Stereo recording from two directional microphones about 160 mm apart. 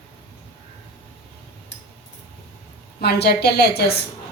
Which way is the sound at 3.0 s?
85° left.